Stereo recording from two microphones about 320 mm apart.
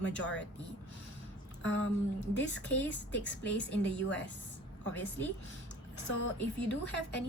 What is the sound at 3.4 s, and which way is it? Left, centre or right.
Speech, centre.